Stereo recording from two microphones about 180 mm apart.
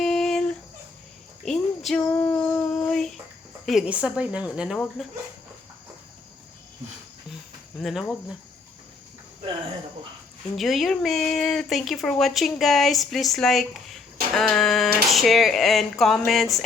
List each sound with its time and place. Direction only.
0.0 s a sound: centre (ahead or behind)
3.7 s speech: 5° right (ahead or behind)
7.8 s speech: centre (ahead or behind)
10.6 s speech: centre (ahead or behind)